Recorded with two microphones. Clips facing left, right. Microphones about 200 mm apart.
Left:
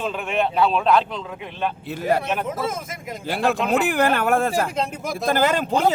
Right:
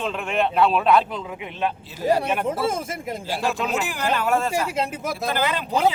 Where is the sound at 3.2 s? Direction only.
60° left (ahead or behind).